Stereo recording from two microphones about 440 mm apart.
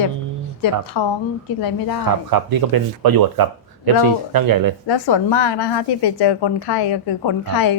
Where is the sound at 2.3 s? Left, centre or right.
Right.